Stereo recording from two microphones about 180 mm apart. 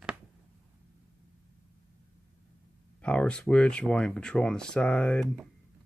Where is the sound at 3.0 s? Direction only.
5° left (ahead or behind).